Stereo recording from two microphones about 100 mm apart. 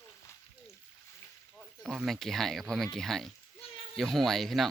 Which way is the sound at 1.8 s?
Centre (ahead or behind).